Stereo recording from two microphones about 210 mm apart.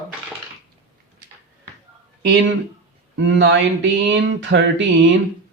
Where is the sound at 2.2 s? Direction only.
55° right (ahead or behind).